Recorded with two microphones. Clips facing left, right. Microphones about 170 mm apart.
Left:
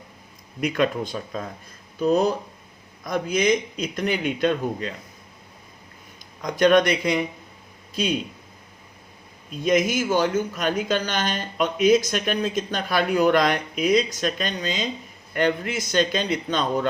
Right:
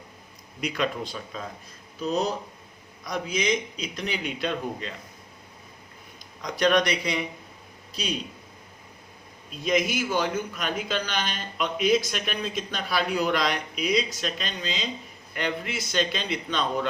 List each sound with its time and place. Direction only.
0.6 s a man's voice: 50° left (ahead or behind)
6.4 s a man's voice: 50° left (ahead or behind)
9.6 s a man's voice: 45° left (ahead or behind)